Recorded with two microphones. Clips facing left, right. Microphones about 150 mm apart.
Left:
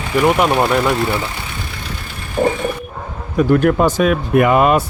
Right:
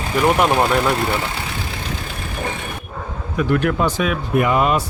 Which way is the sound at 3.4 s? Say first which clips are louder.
Left 5 dB; 40° left (ahead or behind).